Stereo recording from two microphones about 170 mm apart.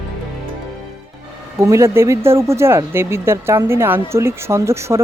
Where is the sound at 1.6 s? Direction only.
15° right (ahead or behind).